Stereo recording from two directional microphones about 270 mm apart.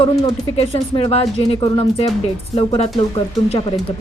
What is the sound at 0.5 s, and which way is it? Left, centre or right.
Speech, left.